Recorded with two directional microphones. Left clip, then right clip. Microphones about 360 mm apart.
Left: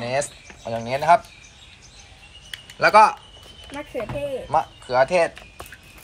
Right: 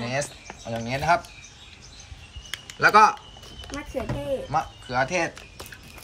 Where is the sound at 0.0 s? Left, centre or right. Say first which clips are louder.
Left 4 dB; centre.